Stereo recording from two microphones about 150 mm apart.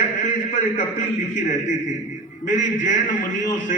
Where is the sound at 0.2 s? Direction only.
60° left (ahead or behind).